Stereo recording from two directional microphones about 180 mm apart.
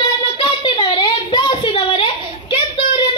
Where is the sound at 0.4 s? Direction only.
30° left (ahead or behind).